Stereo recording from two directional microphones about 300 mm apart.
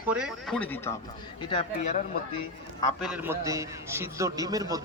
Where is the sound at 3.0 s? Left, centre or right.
Centre.